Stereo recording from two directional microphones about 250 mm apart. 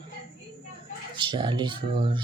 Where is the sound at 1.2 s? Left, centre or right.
Centre.